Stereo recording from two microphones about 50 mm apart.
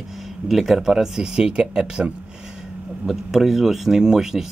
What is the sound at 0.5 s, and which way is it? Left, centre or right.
Speech, centre.